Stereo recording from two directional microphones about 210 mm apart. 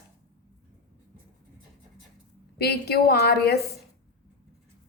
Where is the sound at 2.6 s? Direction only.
50° left (ahead or behind).